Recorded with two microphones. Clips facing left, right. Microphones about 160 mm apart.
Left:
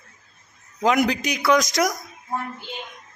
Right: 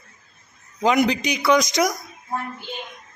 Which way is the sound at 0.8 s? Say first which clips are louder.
Right 1 dB; centre (ahead or behind).